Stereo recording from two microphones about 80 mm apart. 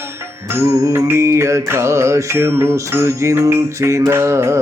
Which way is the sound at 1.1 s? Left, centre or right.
Right.